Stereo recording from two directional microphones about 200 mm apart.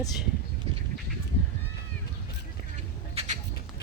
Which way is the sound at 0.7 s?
30° right (ahead or behind).